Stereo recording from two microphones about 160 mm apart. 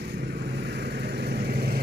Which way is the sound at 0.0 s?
90° right.